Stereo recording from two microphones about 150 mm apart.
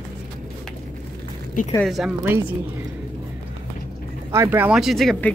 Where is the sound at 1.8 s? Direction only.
Centre (ahead or behind).